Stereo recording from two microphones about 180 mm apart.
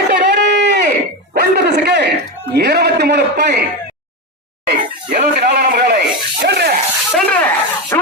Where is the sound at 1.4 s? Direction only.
65° right (ahead or behind).